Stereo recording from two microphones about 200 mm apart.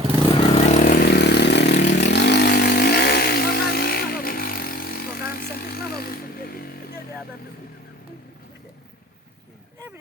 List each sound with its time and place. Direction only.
0.3 s vehicle: 30° left (ahead or behind); by 7.0 s 50° left (ahead or behind)